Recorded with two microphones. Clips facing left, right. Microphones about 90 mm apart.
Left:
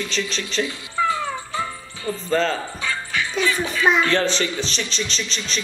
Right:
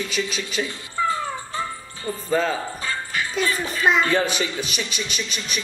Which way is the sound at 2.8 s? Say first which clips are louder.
Left 1 dB; 40° right (ahead or behind).